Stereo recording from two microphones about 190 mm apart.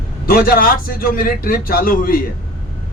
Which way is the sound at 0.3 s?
50° left (ahead or behind).